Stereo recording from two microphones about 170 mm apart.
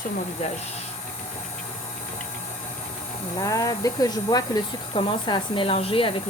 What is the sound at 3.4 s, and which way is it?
Speech, 20° left (ahead or behind).